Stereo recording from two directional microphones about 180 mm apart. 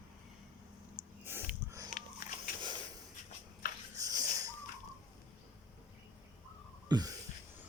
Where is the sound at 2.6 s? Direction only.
25° right (ahead or behind).